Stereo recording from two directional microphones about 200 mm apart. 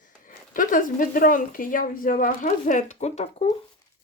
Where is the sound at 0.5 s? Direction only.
45° left (ahead or behind).